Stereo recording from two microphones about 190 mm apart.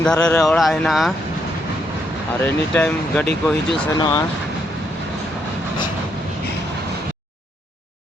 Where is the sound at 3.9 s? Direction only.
20° left (ahead or behind).